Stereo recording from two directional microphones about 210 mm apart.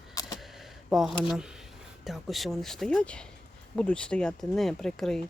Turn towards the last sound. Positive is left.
turn(degrees=0)  # may be behind; listen again after turning